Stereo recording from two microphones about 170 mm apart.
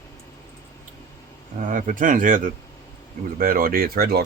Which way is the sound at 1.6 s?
50° right (ahead or behind).